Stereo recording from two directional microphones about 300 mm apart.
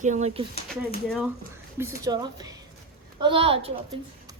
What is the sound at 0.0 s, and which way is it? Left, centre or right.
Speech, right.